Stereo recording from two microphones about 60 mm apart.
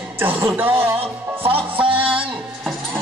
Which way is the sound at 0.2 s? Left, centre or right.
Right.